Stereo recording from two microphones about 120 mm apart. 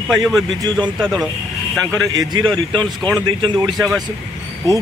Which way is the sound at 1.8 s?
30° right (ahead or behind).